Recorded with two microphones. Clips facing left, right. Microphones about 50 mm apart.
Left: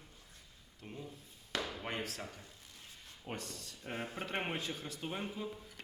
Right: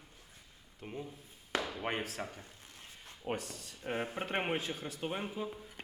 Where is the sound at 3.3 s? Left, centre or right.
Centre.